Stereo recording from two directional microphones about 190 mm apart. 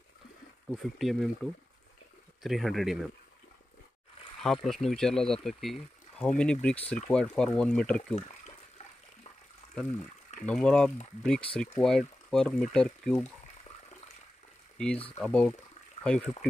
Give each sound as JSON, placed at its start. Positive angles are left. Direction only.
{"t": 0.7, "sound": "speech", "side_deg": 0}
{"t": 4.4, "sound": "speech", "side_deg": 0}
{"t": 8.2, "sound": "a sound", "side_deg": 35}
{"t": 10.4, "sound": "speech", "side_deg": 5}
{"t": 15.1, "sound": "speech", "side_deg": 5}